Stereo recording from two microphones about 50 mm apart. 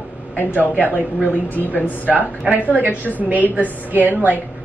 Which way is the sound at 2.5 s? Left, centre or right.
Right.